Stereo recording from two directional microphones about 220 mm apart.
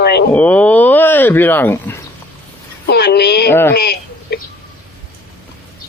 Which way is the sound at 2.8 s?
45° left (ahead or behind).